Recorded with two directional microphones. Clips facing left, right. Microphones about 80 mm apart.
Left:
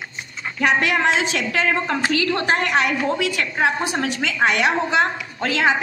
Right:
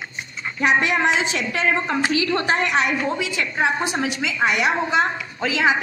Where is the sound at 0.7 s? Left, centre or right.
Centre.